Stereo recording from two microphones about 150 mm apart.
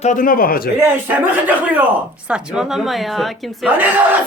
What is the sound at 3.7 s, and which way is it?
Speech, 10° right (ahead or behind).